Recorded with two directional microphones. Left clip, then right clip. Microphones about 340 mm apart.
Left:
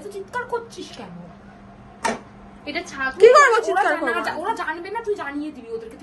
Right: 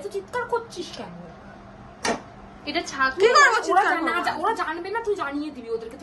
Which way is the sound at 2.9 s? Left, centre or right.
Centre.